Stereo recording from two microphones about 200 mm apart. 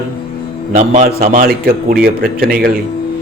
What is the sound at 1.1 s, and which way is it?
A man's voice, 50° right (ahead or behind).